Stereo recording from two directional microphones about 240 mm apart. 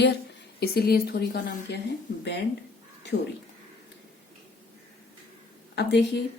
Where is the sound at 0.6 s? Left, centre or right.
Left.